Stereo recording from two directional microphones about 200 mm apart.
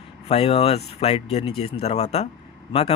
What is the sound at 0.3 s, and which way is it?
Speech, 30° left (ahead or behind).